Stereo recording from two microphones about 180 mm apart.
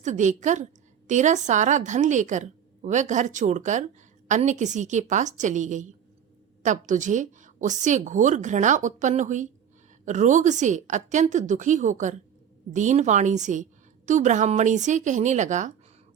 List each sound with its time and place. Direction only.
0.0 s a woman's voice: 45° right (ahead or behind)